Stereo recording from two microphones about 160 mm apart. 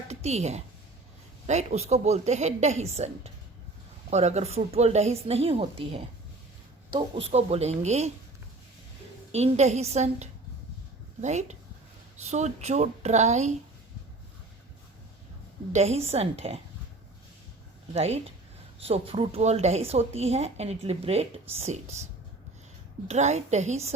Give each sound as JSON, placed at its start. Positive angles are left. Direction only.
{"t": 0.1, "sound": "a woman's voice", "side_deg": -40}
{"t": 9.3, "sound": "a woman's voice", "side_deg": -40}
{"t": 15.7, "sound": "a woman's voice", "side_deg": -40}
{"t": 17.9, "sound": "a woman's voice", "side_deg": -40}
{"t": 23.0, "sound": "a woman's voice", "side_deg": -45}